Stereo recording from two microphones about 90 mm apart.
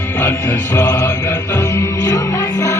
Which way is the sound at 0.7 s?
40° left (ahead or behind).